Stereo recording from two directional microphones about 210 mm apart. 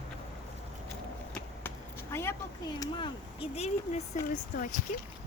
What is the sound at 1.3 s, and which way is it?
Chop, 10° left (ahead or behind).